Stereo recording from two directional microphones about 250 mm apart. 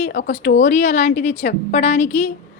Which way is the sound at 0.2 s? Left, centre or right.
Left.